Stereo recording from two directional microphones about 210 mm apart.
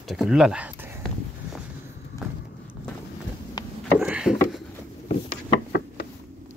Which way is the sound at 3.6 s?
20° left (ahead or behind).